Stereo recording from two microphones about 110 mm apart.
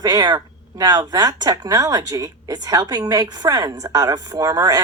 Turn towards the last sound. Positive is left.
turn(degrees=-30)  # may be behind; listen again after turning